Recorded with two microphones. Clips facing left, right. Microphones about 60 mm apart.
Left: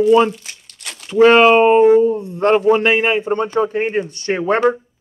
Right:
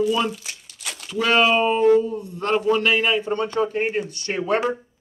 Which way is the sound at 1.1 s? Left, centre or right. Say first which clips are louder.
Left 9 dB; left.